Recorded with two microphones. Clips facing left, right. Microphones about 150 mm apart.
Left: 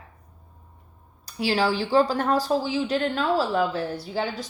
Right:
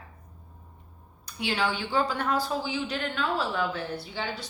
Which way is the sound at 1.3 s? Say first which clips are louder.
Left 6 dB; 35° left (ahead or behind).